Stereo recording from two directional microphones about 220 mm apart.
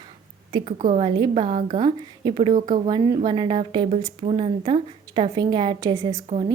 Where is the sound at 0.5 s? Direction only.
30° right (ahead or behind).